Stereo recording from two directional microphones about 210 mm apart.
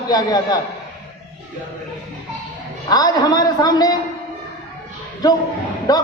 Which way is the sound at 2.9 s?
20° left (ahead or behind).